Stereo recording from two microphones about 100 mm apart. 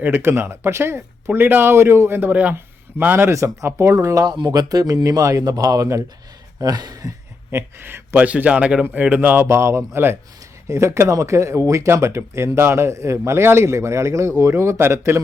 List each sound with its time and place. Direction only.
0.0 s speech: 25° right (ahead or behind); by 7.1 s 40° right (ahead or behind)
7.5 s speech: 25° right (ahead or behind)
9.5 s speech: 25° right (ahead or behind)